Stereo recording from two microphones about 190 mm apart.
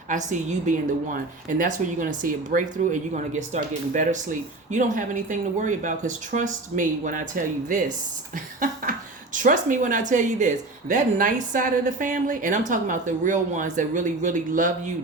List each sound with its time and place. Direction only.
0.1 s a woman's voice: 40° right (ahead or behind)
8.6 s a sound: 45° right (ahead or behind)
10.1 s a woman's voice: 40° right (ahead or behind)